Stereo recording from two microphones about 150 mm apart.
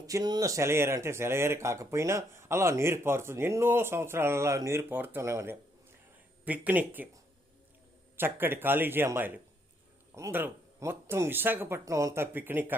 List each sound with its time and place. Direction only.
0.1 s speech: 25° right (ahead or behind)
8.1 s speech: 15° right (ahead or behind)